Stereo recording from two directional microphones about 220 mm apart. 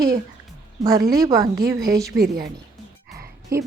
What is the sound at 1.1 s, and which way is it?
Speech, 15° right (ahead or behind).